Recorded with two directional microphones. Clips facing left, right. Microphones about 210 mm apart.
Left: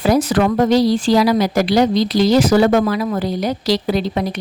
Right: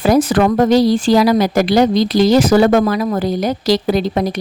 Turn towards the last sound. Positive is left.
turn(degrees=-45)  # may be behind; listen again after turning